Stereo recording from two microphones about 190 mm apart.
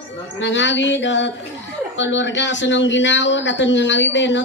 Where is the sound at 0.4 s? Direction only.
70° left (ahead or behind).